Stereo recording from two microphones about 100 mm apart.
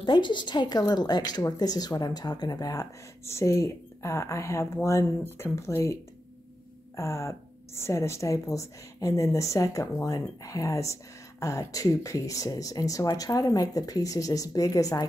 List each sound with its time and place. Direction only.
0.0 s a woman's voice: 55° left (ahead or behind); by 5.9 s 30° left (ahead or behind)
7.0 s speech: 30° left (ahead or behind)